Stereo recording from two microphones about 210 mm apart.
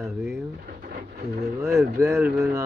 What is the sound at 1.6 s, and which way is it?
Speech, 15° right (ahead or behind).